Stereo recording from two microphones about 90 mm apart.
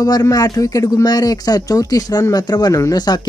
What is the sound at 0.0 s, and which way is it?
Speech, 45° left (ahead or behind).